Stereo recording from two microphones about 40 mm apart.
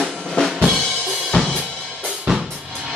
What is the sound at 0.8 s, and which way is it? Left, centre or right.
Drum kit, left.